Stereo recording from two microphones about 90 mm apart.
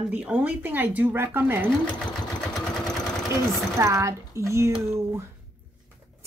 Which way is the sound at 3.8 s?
35° right (ahead or behind).